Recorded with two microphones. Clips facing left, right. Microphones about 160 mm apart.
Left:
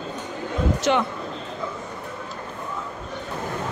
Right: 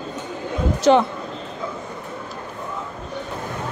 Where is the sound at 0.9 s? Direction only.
35° right (ahead or behind).